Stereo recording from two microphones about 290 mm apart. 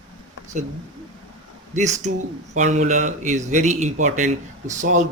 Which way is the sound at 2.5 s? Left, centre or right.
Right.